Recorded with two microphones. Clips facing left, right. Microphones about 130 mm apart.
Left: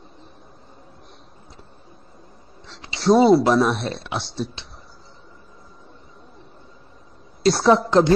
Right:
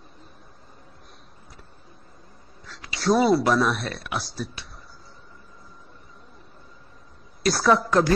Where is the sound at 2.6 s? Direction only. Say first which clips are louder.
Left 1 dB; 25° left (ahead or behind).